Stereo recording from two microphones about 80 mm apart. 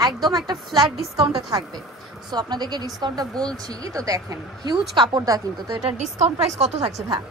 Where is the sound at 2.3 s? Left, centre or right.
Right.